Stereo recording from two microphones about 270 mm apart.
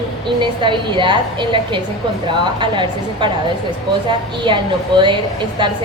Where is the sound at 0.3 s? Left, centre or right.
Centre.